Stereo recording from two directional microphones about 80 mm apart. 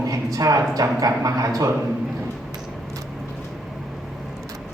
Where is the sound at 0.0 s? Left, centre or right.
Right.